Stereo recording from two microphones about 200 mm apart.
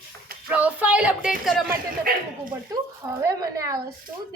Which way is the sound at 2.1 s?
45° right (ahead or behind).